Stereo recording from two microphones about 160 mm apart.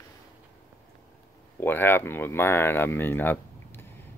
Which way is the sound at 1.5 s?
10° left (ahead or behind).